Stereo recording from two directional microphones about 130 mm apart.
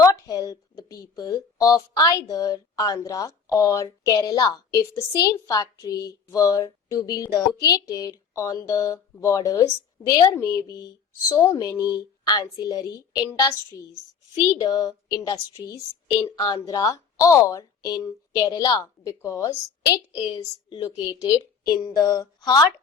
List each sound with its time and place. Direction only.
0.0 s speech: 25° left (ahead or behind)
14.5 s speech: 25° left (ahead or behind)